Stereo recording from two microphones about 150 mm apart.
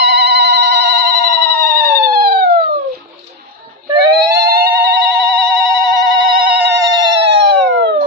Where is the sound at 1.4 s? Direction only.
85° right.